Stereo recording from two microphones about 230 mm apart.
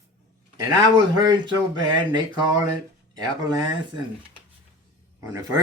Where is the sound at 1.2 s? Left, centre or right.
Centre.